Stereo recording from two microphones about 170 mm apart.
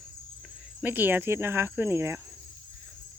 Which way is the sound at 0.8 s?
10° right (ahead or behind).